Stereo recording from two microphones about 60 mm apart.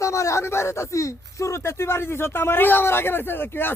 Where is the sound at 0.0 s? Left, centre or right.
Left.